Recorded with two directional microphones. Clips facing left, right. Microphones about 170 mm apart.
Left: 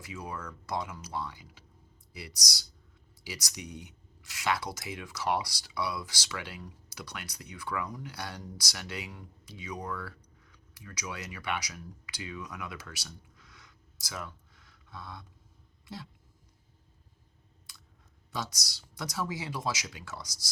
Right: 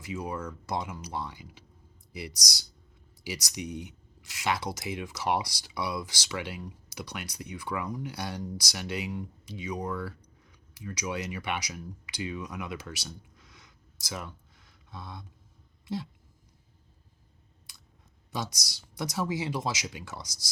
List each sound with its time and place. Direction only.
0.3 s speech: 25° right (ahead or behind)
14.8 s a sound: 20° right (ahead or behind)
18.3 s speech: 15° right (ahead or behind)